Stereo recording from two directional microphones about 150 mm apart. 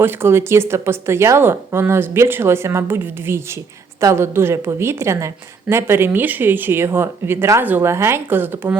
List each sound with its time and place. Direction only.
0.0 s a woman's voice: 15° right (ahead or behind)